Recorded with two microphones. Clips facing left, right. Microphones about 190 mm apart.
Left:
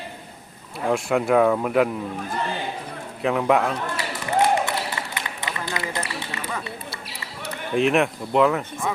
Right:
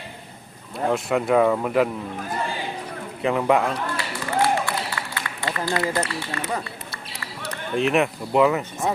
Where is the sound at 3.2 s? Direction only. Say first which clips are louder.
Even; centre (ahead or behind).